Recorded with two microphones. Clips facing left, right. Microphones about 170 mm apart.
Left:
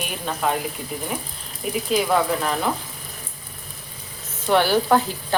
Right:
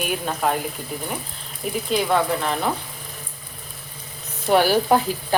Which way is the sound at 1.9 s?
Centre (ahead or behind).